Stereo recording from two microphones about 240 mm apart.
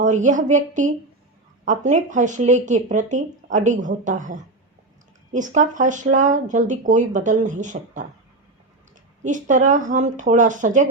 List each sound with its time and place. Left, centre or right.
0.0 s speech: right
9.2 s speech: right